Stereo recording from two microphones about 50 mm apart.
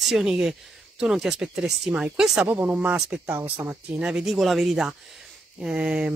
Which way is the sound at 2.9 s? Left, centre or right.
Centre.